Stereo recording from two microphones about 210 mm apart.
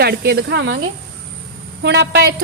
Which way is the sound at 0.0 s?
50° right (ahead or behind).